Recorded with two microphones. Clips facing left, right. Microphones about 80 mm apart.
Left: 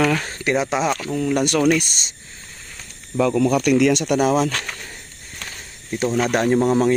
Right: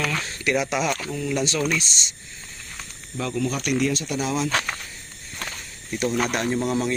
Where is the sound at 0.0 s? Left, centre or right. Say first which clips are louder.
Left 8 dB; left.